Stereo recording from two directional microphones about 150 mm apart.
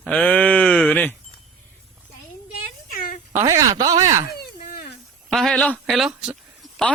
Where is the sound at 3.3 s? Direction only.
20° right (ahead or behind).